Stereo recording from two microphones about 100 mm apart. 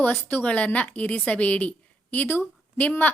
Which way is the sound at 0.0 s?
20° left (ahead or behind).